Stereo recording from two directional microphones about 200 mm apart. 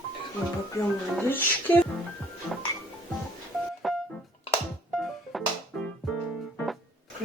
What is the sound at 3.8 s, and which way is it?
Music, centre (ahead or behind).